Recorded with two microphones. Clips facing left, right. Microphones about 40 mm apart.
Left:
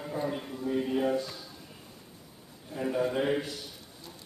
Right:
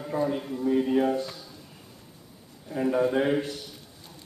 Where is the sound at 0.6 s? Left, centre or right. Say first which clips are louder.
Right 5 dB; centre.